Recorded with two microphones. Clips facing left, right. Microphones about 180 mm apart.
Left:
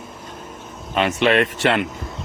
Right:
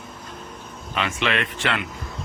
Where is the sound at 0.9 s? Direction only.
40° left (ahead or behind).